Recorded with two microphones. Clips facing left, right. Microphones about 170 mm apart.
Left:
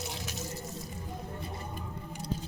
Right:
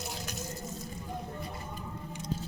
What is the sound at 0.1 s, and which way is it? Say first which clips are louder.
Water: even; centre (ahead or behind).